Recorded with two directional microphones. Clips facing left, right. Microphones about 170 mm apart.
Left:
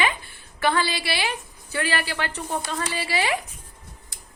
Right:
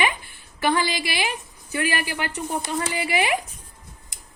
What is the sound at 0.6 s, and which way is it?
A woman's voice, 20° right (ahead or behind).